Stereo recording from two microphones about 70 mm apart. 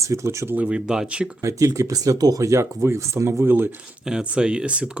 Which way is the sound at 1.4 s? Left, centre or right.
Right.